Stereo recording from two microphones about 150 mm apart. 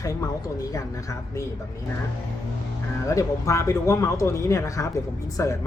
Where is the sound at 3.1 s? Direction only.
20° left (ahead or behind).